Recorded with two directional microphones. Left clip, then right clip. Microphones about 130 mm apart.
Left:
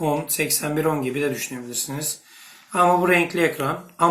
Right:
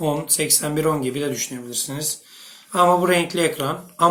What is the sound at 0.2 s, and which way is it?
Speech, 40° right (ahead or behind).